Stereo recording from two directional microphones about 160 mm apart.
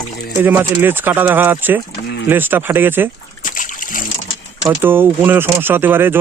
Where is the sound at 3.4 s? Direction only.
55° left (ahead or behind).